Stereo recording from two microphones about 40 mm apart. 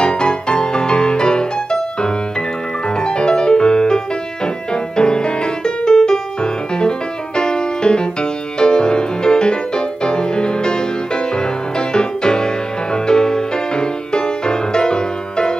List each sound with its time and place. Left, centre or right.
0.0 s music: left